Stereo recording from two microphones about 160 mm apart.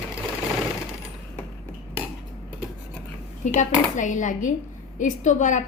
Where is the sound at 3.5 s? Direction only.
50° left (ahead or behind).